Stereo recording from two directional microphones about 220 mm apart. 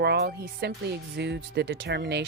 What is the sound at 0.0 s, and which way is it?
Speech, 50° right (ahead or behind).